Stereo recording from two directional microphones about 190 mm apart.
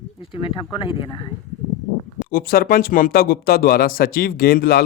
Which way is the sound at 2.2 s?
50° left (ahead or behind).